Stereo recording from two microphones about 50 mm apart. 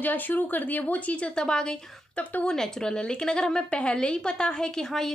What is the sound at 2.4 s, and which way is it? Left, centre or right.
A woman's voice, centre.